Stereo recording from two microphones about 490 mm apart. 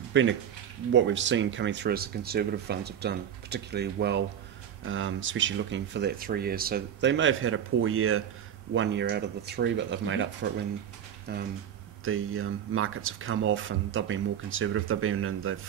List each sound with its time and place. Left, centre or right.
0.1 s speech: right